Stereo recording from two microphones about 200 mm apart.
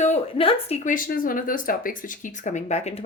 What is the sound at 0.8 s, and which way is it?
Speech, 45° left (ahead or behind).